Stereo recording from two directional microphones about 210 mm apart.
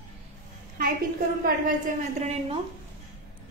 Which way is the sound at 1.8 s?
30° right (ahead or behind).